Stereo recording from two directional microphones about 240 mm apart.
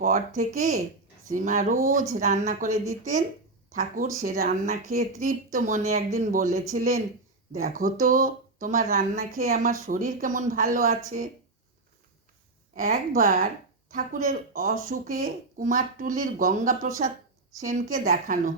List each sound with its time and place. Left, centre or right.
0.3 s speech: right
2.6 s speech: centre
3.8 s speech: right
12.7 s speech: right